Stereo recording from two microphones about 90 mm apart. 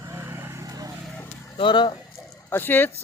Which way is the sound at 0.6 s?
45° right (ahead or behind).